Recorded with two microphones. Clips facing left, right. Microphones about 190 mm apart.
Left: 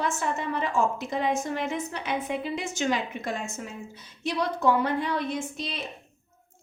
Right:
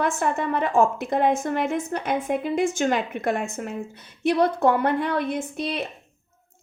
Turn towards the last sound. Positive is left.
turn(degrees=-60)  # may be behind; listen again after turning